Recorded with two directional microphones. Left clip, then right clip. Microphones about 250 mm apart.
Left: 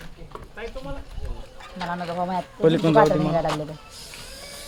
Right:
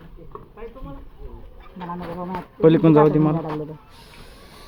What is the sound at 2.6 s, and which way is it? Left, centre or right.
Speech, centre.